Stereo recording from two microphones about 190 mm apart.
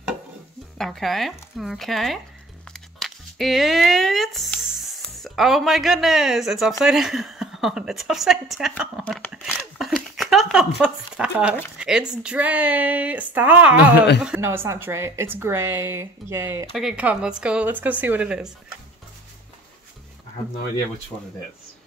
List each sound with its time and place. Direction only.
0.7 s a woman's voice: centre (ahead or behind)
9.3 s a sound: 5° right (ahead or behind)
10.8 s a woman's voice: 5° right (ahead or behind)
16.7 s a woman's voice: 5° right (ahead or behind)